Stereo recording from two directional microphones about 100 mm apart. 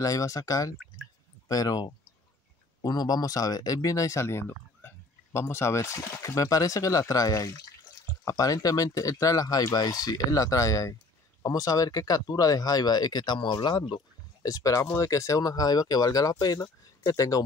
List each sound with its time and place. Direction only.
0.0 s speech: 35° left (ahead or behind)
14.4 s speech: 35° left (ahead or behind)